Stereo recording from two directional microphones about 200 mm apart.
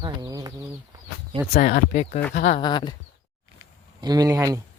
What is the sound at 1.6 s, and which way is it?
Speech, 40° left (ahead or behind).